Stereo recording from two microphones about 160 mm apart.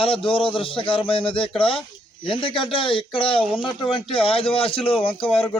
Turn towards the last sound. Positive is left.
turn(degrees=35)  # may be behind; listen again after turning